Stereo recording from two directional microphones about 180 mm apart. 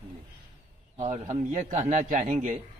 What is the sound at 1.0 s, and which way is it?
A man's voice, 40° right (ahead or behind).